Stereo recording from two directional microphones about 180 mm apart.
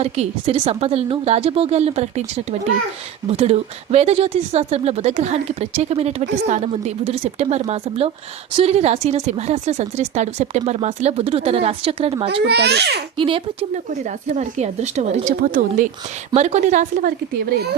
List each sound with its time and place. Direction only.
0.0 s speech: 35° right (ahead or behind)
12.5 s a child's voice: 65° right (ahead or behind)
13.1 s speech: 30° right (ahead or behind); by 17.2 s 45° right (ahead or behind)